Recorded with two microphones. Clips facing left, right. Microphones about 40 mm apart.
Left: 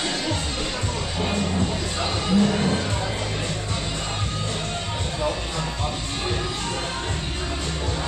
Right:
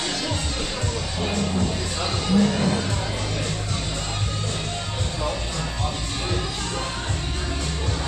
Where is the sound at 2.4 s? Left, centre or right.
Centre.